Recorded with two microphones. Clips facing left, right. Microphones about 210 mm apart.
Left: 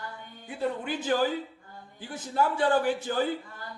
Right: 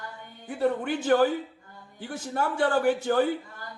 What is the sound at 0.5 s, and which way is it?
Speech, 55° right (ahead or behind).